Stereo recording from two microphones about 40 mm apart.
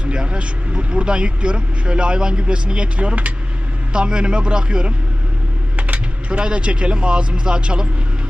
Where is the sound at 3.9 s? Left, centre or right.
Right.